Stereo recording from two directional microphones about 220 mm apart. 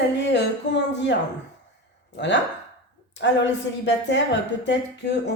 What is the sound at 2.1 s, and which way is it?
A woman's voice, 55° left (ahead or behind).